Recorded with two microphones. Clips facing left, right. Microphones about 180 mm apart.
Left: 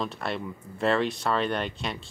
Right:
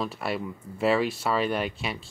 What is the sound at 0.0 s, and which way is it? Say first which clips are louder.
Speech: right 1 dB; 5° right (ahead or behind).